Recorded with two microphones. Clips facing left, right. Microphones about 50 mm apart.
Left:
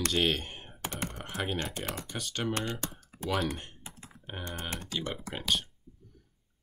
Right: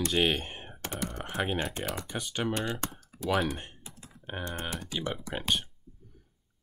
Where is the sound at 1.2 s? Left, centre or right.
Centre.